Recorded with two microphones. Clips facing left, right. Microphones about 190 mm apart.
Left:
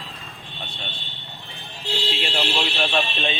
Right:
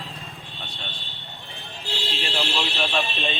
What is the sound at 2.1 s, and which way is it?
Speech, centre (ahead or behind).